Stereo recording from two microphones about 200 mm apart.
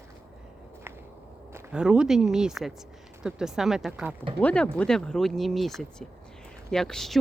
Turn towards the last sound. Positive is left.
turn(degrees=0)  # may be behind; listen again after turning